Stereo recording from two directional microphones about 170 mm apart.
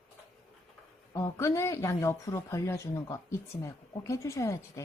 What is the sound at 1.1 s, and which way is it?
Speech, 20° left (ahead or behind).